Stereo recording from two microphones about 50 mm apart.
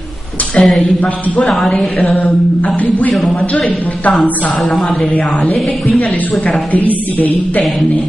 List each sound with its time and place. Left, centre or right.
0.6 s a woman's voice: centre
1.8 s a woman's voice: centre
2.1 s speech: left
4.1 s a woman's voice: centre
5.1 s a woman's voice: left